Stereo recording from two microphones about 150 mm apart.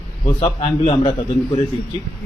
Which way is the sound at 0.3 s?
35° left (ahead or behind).